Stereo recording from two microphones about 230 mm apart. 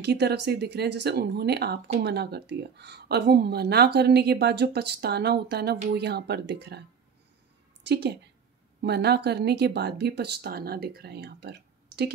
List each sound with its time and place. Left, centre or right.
0.0 s speech: right
7.8 s a woman's voice: right